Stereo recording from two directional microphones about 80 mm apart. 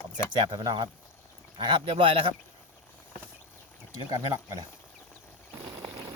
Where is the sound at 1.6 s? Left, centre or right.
Right.